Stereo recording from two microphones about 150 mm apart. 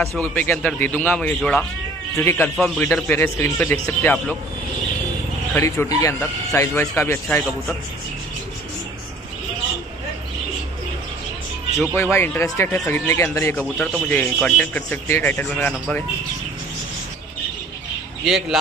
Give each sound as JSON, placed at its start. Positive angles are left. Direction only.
{"t": 0.2, "sound": "speech", "side_deg": 10}
{"t": 2.1, "sound": "speech", "side_deg": 20}
{"t": 2.5, "sound": "speech", "side_deg": 0}
{"t": 3.1, "sound": "speech", "side_deg": 15}
{"t": 5.5, "sound": "speech", "side_deg": 15}
{"t": 11.9, "sound": "speech", "side_deg": 15}
{"t": 13.6, "sound": "speech", "side_deg": 5}
{"t": 18.2, "sound": "speech", "side_deg": 0}